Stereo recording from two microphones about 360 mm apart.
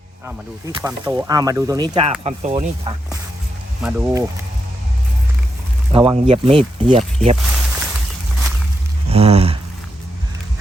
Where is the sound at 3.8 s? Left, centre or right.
Centre.